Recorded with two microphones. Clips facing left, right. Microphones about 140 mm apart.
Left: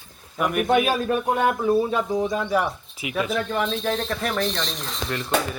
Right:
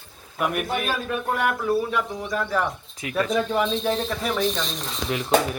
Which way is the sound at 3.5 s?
5° right (ahead or behind).